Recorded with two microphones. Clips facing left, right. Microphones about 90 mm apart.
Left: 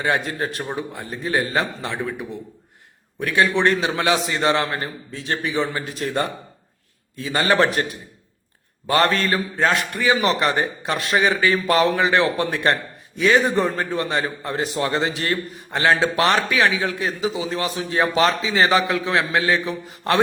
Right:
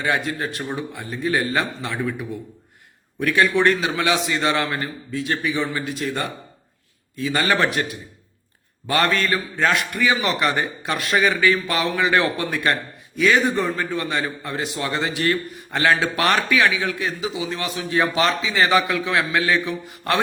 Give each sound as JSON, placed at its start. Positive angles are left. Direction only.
{"t": 0.0, "sound": "a man's voice", "side_deg": 35}
{"t": 8.9, "sound": "a man's voice", "side_deg": 35}
{"t": 12.1, "sound": "a man's voice", "side_deg": 25}